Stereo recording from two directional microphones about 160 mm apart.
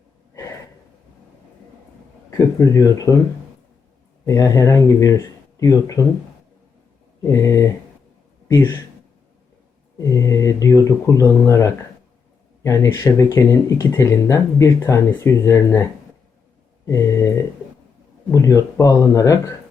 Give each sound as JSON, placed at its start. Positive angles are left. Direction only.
{"t": 2.7, "sound": "speech", "side_deg": 20}
{"t": 4.3, "sound": "speech", "side_deg": 20}
{"t": 7.3, "sound": "speech", "side_deg": 20}
{"t": 10.0, "sound": "speech", "side_deg": 20}
{"t": 16.9, "sound": "speech", "side_deg": 20}